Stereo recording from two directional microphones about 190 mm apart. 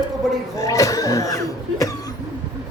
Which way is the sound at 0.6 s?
15° left (ahead or behind).